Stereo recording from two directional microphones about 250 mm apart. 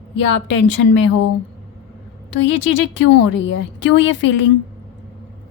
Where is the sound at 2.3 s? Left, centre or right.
Left.